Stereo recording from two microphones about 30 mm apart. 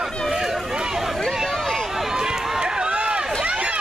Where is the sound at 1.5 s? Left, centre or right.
Centre.